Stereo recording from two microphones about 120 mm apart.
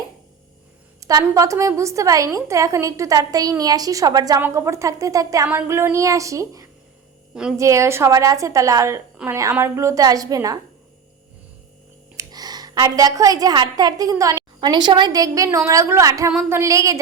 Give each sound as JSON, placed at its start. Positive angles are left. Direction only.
{"t": 0.9, "sound": "a sound", "side_deg": -30}
{"t": 1.3, "sound": "a woman's voice", "side_deg": -25}
{"t": 4.4, "sound": "a woman's voice", "side_deg": -20}
{"t": 12.1, "sound": "a woman's voice", "side_deg": -35}